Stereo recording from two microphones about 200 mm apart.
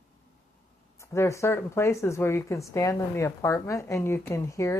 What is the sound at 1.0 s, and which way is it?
A woman's voice, 15° left (ahead or behind).